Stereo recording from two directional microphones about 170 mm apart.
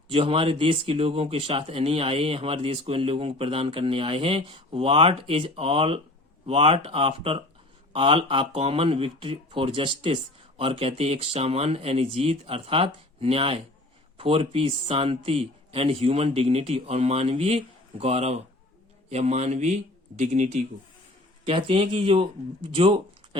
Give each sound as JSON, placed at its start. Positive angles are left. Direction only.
{"t": 0.1, "sound": "speech", "side_deg": -30}
{"t": 21.4, "sound": "speech", "side_deg": -35}